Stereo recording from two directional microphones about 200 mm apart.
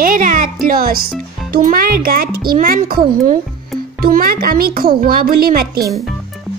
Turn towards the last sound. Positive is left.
turn(degrees=-45)  # may be behind; listen again after turning